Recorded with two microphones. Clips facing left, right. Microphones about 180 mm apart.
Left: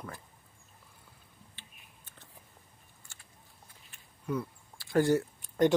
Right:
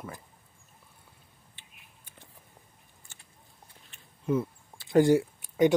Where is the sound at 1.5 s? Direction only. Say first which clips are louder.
Left 1 dB; 10° right (ahead or behind).